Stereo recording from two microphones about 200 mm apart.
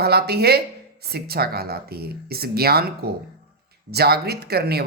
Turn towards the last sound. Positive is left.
turn(degrees=-50)  # may be behind; listen again after turning